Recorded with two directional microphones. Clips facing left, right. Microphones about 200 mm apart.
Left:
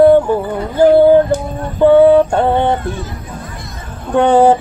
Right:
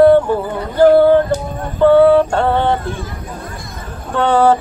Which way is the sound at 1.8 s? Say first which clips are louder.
Left 2 dB; 15° left (ahead or behind).